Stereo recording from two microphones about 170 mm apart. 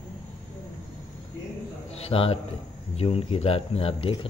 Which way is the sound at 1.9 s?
35° left (ahead or behind).